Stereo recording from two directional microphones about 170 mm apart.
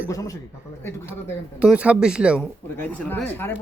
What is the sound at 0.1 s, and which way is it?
Speech, 20° left (ahead or behind).